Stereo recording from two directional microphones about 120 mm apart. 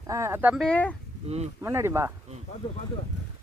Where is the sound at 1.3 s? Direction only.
60° right (ahead or behind).